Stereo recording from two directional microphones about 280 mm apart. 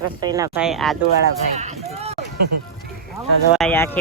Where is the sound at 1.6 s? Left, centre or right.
Right.